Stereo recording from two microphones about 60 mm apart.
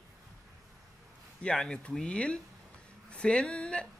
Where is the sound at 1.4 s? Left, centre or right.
Centre.